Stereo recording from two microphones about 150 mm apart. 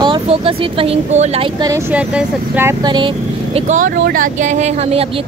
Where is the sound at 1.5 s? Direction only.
25° right (ahead or behind).